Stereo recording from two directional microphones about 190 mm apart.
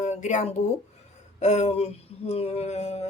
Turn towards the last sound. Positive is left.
turn(degrees=35)  # may be behind; listen again after turning